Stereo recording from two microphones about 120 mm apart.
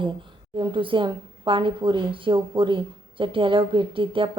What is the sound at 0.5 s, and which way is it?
Speech, 45° right (ahead or behind).